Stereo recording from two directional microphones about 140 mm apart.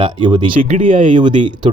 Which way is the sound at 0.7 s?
65° right (ahead or behind).